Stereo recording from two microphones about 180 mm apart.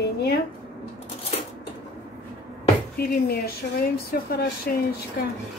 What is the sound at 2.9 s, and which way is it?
Speech, 60° left (ahead or behind).